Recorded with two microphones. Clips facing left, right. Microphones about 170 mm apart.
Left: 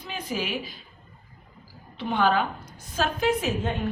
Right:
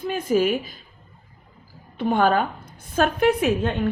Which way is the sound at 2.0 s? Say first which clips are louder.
Right 4 dB; 50° right (ahead or behind).